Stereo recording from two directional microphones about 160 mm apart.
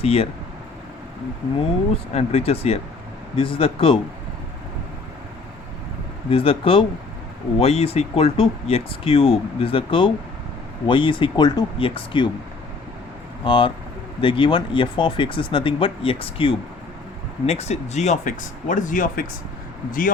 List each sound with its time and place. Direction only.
0.0 s speech: 40° left (ahead or behind)
2.1 s speech: 40° left (ahead or behind)
6.3 s speech: 35° left (ahead or behind)
13.4 s speech: 30° left (ahead or behind); by 19.2 s 55° left (ahead or behind)